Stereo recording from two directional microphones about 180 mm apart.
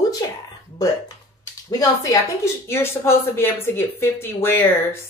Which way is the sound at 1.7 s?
20° left (ahead or behind).